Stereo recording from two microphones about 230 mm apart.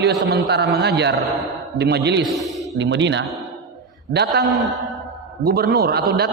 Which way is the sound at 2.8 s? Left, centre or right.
Right.